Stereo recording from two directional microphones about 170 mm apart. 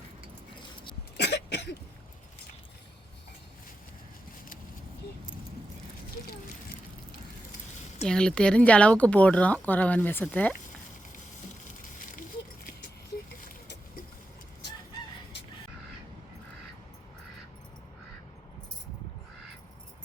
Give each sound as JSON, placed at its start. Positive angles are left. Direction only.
{"t": 1.1, "sound": "cough", "side_deg": 80}
{"t": 8.0, "sound": "speech", "side_deg": 5}